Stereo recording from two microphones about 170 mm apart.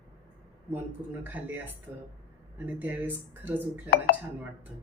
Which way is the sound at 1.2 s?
10° right (ahead or behind).